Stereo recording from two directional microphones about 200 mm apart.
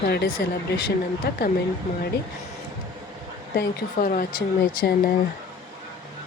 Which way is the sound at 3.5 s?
45° left (ahead or behind).